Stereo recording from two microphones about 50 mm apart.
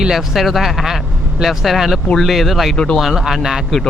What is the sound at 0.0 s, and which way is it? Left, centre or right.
Speech, centre.